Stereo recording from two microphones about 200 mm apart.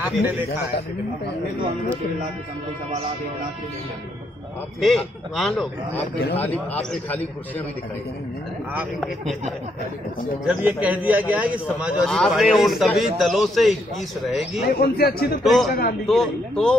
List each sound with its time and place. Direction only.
0.0 s a sound: 10° right (ahead or behind)
4.7 s a man's voice: centre (ahead or behind)
10.4 s a man's voice: 5° right (ahead or behind)
14.7 s a man's voice: 50° left (ahead or behind)
15.4 s a man's voice: centre (ahead or behind)